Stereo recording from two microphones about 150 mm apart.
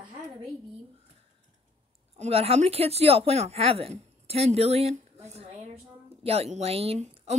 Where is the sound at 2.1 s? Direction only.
45° right (ahead or behind).